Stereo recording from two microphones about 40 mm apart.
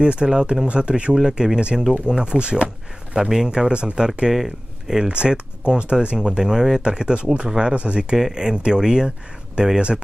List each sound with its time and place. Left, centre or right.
0.0 s speech: right
1.1 s speech: centre
3.2 s speech: centre
4.3 s speech: centre
5.0 s speech: right
8.2 s speech: centre
9.6 s speech: right